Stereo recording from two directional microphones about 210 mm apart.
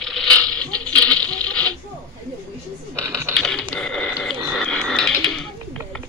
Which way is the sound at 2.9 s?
15° right (ahead or behind).